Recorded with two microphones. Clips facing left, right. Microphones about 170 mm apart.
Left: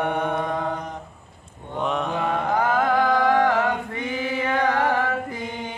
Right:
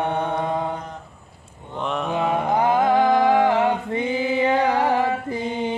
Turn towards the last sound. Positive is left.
turn(degrees=-20)  # may be behind; listen again after turning